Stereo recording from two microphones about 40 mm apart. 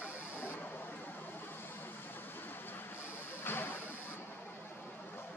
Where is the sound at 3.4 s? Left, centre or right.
Left.